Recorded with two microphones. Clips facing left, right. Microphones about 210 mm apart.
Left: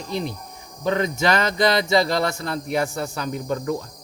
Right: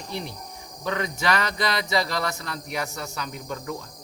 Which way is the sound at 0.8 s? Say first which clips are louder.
Left 5 dB; 30° left (ahead or behind).